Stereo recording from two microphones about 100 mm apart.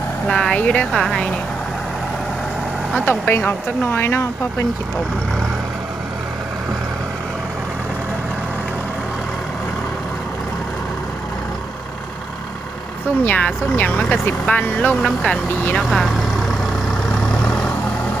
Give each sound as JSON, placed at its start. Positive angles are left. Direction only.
{"t": 0.3, "sound": "speech", "side_deg": 5}
{"t": 3.1, "sound": "speech", "side_deg": 25}
{"t": 13.2, "sound": "speech", "side_deg": 15}
{"t": 15.8, "sound": "vehicle", "side_deg": 0}